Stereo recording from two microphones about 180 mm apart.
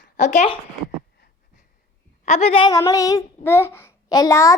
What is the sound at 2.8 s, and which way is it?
A child's voice, 20° left (ahead or behind).